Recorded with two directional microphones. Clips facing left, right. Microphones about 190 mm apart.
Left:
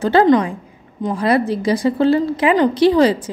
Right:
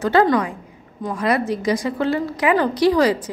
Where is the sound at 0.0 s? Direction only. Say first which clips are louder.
Left 4 dB; 25° left (ahead or behind).